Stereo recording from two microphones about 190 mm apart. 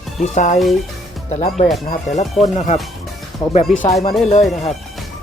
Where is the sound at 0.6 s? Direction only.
Centre (ahead or behind).